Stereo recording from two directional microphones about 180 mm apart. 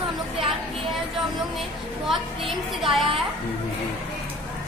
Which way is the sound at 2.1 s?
Centre (ahead or behind).